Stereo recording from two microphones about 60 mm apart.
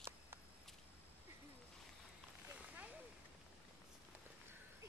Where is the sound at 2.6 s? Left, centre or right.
Right.